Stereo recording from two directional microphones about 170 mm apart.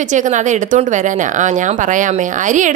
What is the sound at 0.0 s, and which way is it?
Speech, 45° right (ahead or behind).